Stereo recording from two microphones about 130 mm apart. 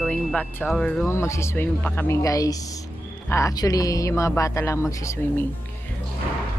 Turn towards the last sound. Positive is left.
turn(degrees=20)  # may be behind; listen again after turning